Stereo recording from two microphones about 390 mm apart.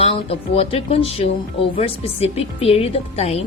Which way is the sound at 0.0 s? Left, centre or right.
Centre.